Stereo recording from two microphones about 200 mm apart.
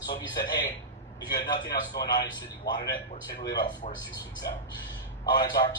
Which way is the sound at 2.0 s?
20° left (ahead or behind).